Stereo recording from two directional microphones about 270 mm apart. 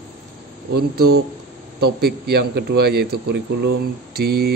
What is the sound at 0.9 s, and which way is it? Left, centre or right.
Speech, right.